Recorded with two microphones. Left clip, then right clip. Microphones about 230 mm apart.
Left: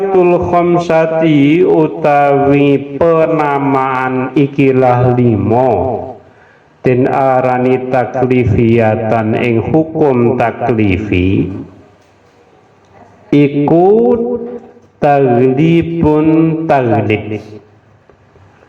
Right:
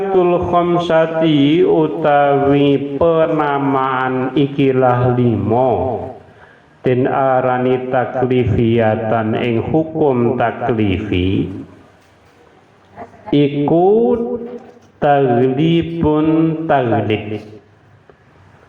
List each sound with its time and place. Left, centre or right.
0.0 s speech: left
6.8 s speech: left
13.3 s speech: left